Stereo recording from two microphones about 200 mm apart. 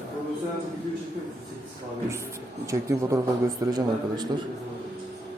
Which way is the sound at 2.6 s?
15° right (ahead or behind).